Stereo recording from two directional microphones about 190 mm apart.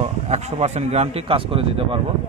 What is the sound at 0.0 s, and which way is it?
Speech, 35° right (ahead or behind).